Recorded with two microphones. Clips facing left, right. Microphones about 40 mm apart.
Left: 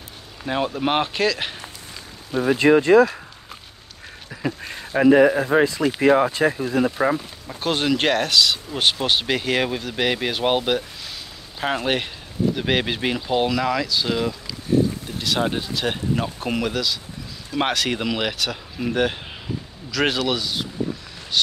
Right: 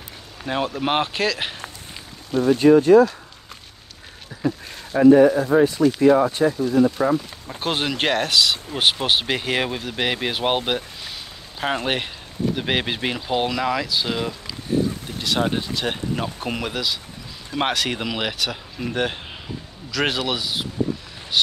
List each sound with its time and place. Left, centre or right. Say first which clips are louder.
0.4 s speech: left 1 dB; centre
2.6 s speech: right 1 dB; left
4.3 s duck: right 2 dB; left
4.9 s speech: right 2 dB; left
5.3 s speech: right 1 dB; left
5.9 s speech: even; left
6.7 s speech: right 2 dB; left
7.6 s speech: left 2 dB; centre